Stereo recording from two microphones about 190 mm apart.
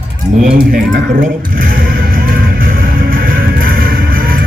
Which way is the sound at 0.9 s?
45° right (ahead or behind).